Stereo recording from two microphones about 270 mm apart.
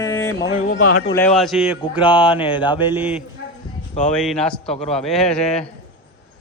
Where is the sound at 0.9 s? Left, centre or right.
Left.